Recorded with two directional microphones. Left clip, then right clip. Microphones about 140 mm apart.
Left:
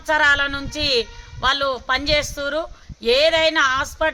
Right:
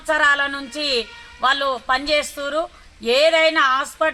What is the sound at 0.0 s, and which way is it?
A woman's voice, 35° left (ahead or behind).